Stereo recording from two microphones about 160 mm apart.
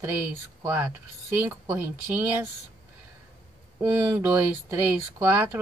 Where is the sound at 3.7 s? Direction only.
15° right (ahead or behind).